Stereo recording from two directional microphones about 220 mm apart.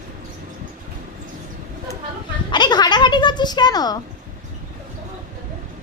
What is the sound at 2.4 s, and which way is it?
Music, 20° left (ahead or behind).